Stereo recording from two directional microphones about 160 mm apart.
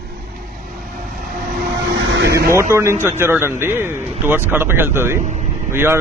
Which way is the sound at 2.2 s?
75° right (ahead or behind).